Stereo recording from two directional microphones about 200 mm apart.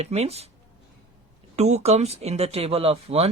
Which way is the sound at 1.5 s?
35° right (ahead or behind).